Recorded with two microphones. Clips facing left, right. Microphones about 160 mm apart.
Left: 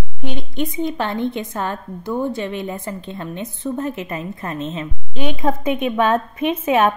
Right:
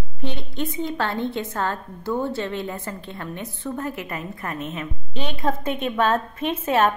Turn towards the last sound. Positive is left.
turn(degrees=15)  # may be behind; listen again after turning